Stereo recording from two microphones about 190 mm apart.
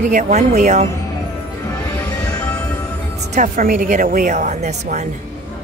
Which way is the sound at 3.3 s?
45° right (ahead or behind).